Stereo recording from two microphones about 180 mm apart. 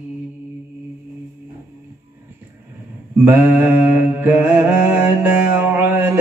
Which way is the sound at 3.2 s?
10° right (ahead or behind).